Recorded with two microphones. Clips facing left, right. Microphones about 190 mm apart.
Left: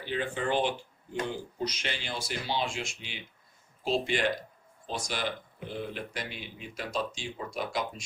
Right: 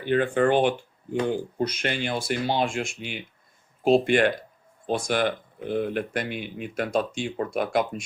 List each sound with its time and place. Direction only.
0.0 s speech: 55° right (ahead or behind)